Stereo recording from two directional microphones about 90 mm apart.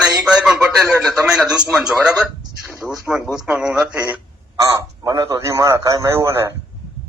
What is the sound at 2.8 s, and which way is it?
Speech, 5° right (ahead or behind).